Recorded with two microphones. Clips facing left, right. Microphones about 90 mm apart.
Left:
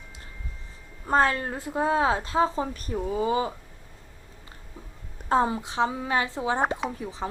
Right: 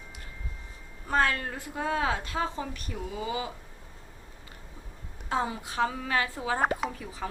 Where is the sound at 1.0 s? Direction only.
30° left (ahead or behind).